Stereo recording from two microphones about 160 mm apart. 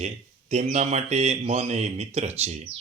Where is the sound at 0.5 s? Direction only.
45° right (ahead or behind).